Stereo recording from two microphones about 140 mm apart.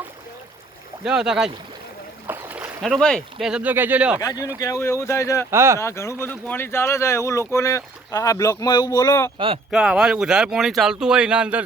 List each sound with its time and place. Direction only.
1.0 s speech: 5° right (ahead or behind)
2.2 s boat: 10° right (ahead or behind)
2.8 s speech: centre (ahead or behind)
4.2 s speech: 25° left (ahead or behind)
5.5 s speech: 20° right (ahead or behind)
5.8 s speech: 20° left (ahead or behind)
9.7 s speech: 5° right (ahead or behind)